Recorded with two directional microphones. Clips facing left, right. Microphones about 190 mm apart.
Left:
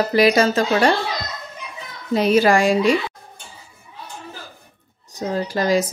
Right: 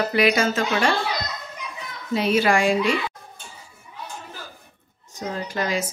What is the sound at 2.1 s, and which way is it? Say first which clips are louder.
Speech: left 4 dB; 40° left (ahead or behind).